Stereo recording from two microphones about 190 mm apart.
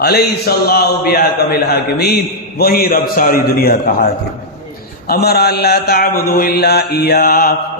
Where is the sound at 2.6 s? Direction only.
50° left (ahead or behind).